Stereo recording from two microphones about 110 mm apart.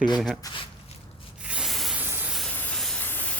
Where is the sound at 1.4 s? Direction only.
10° right (ahead or behind).